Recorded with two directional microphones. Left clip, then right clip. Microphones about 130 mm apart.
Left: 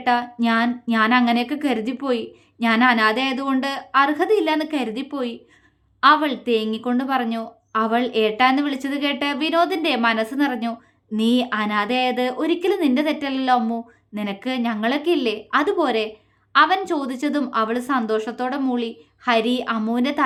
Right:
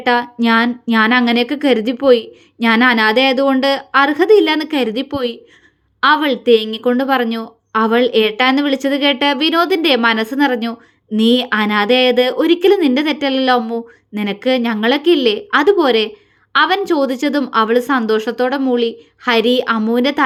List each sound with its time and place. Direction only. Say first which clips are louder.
0.0 s a woman's voice: right 5 dB; 40° right (ahead or behind)